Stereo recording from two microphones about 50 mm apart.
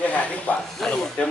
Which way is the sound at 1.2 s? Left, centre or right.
Left.